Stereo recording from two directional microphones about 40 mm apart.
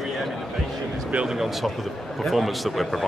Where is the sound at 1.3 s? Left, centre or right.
Centre.